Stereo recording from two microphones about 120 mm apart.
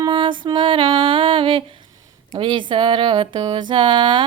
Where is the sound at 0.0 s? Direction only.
40° right (ahead or behind).